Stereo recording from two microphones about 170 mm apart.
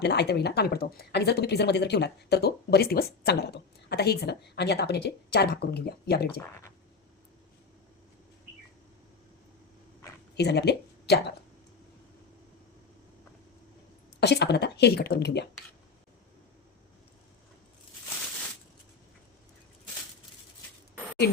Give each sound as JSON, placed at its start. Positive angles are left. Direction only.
{"t": 0.0, "sound": "a woman's voice", "side_deg": 80}
{"t": 10.3, "sound": "speech", "side_deg": 80}
{"t": 14.2, "sound": "a woman's voice", "side_deg": 75}